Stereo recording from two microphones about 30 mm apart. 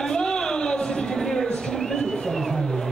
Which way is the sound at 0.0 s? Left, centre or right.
Left.